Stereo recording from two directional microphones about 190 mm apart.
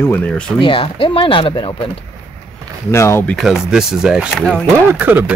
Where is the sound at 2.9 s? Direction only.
15° left (ahead or behind).